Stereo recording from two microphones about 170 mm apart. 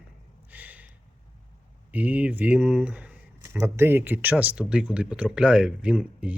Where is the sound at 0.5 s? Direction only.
10° right (ahead or behind).